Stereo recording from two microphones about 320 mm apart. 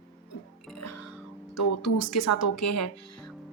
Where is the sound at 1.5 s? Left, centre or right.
Left.